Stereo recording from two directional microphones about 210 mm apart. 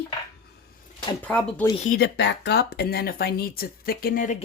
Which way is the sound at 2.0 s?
55° left (ahead or behind).